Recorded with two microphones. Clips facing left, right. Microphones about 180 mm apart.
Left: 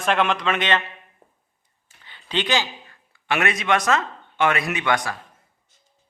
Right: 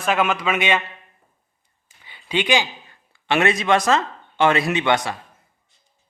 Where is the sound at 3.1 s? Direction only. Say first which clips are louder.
Right 4 dB; 30° right (ahead or behind).